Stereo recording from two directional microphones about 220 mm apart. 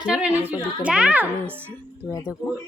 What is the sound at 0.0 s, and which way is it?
A woman's voice, 5° right (ahead or behind).